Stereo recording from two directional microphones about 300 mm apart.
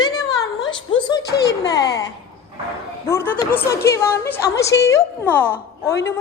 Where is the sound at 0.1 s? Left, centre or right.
Centre.